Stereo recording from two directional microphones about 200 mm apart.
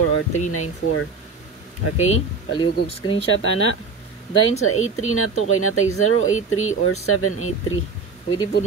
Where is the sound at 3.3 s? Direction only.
85° left.